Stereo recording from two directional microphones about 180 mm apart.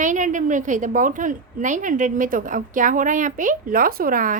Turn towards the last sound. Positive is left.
turn(degrees=-50)  # may be behind; listen again after turning